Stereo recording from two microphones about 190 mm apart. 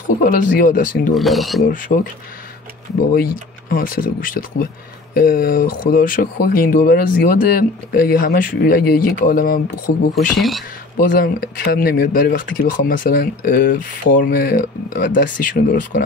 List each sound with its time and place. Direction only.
0.2 s speech: 50° left (ahead or behind)
1.1 s speech: centre (ahead or behind)
1.6 s speech: 45° left (ahead or behind)
3.1 s speech: 50° left (ahead or behind)
10.1 s speech: centre (ahead or behind)
11.0 s speech: 50° left (ahead or behind)